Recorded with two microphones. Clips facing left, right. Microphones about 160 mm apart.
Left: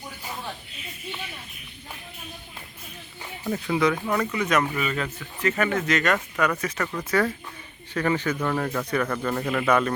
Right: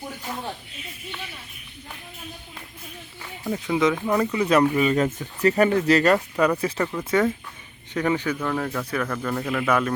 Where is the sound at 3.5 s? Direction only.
15° right (ahead or behind).